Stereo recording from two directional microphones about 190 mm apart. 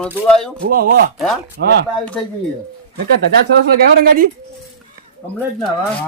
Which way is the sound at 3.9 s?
50° right (ahead or behind).